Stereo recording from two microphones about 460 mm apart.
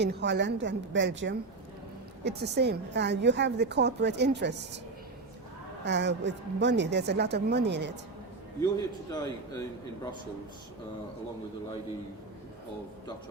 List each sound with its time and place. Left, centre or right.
0.0 s a woman's voice: right
5.8 s a woman's voice: right
8.6 s a man's voice: centre